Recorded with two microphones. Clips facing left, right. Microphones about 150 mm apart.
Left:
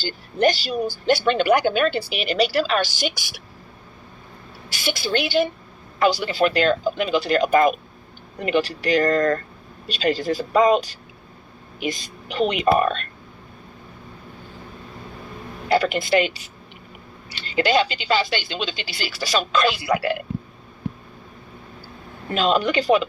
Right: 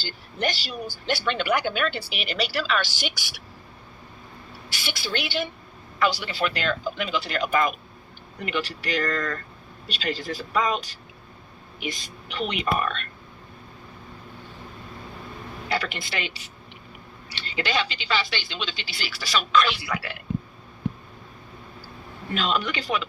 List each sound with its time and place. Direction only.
0.0 s speech: 40° left (ahead or behind)
4.7 s a woman's voice: 45° left (ahead or behind)
12.4 s speech: 35° left (ahead or behind)
15.7 s speech: 45° left (ahead or behind)
22.4 s speech: 35° left (ahead or behind)